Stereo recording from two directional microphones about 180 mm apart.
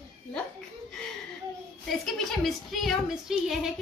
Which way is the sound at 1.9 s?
Centre (ahead or behind).